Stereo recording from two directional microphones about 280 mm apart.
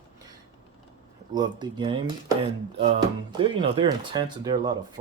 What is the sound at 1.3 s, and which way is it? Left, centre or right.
Speech, centre.